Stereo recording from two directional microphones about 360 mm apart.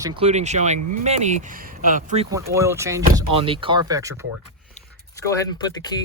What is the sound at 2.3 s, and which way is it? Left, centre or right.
Speech, centre.